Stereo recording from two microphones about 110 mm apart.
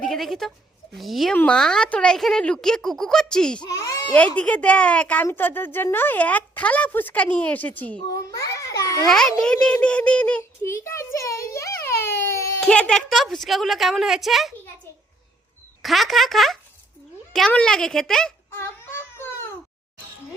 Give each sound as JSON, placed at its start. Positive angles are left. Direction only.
{"t": 0.0, "sound": "a woman's voice", "side_deg": 5}
{"t": 3.6, "sound": "a child's voice", "side_deg": 30}
{"t": 4.4, "sound": "speech", "side_deg": 10}
{"t": 8.1, "sound": "a child's voice", "side_deg": 30}
{"t": 9.0, "sound": "a woman's voice", "side_deg": 5}
{"t": 10.7, "sound": "a sound", "side_deg": 25}
{"t": 12.6, "sound": "a woman's voice", "side_deg": 10}
{"t": 15.8, "sound": "a woman's voice", "side_deg": 0}
{"t": 18.5, "sound": "a sound", "side_deg": 20}